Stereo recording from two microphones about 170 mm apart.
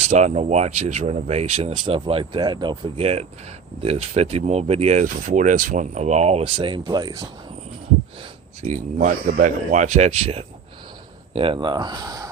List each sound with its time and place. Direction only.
0.1 s speech: 40° right (ahead or behind); by 7.3 s 20° right (ahead or behind)
8.6 s speech: 45° right (ahead or behind); by 12.3 s 20° right (ahead or behind)